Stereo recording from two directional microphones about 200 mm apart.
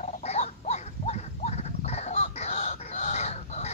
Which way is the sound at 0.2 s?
35° left (ahead or behind).